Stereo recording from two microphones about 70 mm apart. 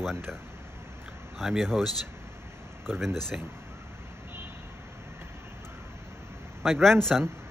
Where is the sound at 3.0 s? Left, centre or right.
Centre.